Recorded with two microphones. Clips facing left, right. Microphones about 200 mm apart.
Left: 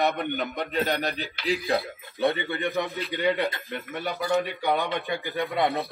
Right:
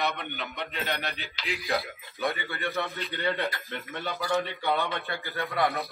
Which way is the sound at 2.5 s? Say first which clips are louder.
Left 4 dB; 15° left (ahead or behind).